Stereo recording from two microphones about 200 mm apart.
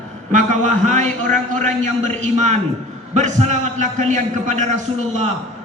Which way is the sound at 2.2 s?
35° right (ahead or behind).